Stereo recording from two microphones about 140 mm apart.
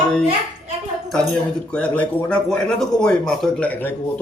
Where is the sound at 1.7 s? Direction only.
10° left (ahead or behind).